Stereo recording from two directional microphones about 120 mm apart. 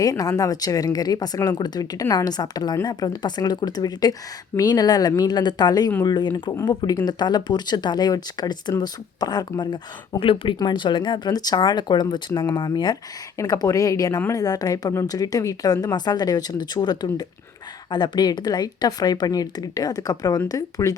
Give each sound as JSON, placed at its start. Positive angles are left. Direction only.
{"t": 0.0, "sound": "speech", "side_deg": 30}